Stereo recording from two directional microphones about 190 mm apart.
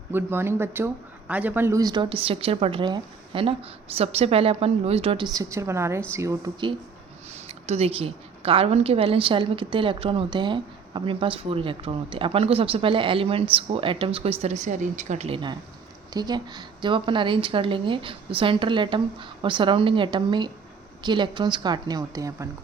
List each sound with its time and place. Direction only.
0.1 s a woman's voice: 10° right (ahead or behind)
7.4 s a woman's voice: 35° right (ahead or behind)